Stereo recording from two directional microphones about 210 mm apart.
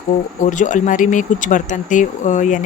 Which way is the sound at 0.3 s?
35° left (ahead or behind).